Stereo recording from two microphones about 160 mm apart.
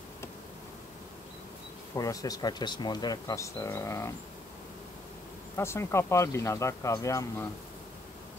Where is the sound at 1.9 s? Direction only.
20° left (ahead or behind).